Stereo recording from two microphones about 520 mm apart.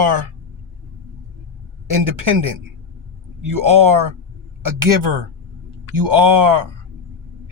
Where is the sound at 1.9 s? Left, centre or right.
Right.